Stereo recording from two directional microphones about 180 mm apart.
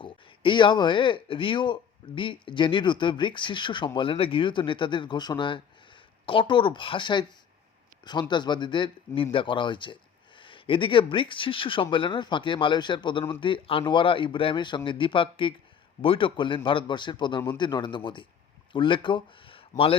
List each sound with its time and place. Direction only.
0.0 s speech: 25° left (ahead or behind)